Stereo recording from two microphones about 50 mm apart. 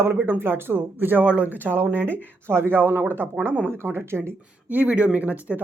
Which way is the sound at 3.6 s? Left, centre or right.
Right.